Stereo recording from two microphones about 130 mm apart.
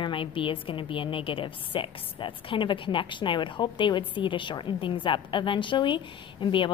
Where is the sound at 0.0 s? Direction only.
40° left (ahead or behind).